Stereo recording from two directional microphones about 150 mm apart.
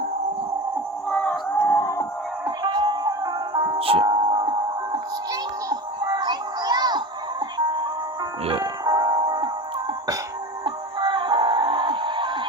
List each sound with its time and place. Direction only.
1.1 s music: 10° left (ahead or behind)
1.6 s a sound: 20° left (ahead or behind)
2.6 s music: 30° right (ahead or behind)
3.8 s music: 40° right (ahead or behind)
10.6 s music: 30° right (ahead or behind)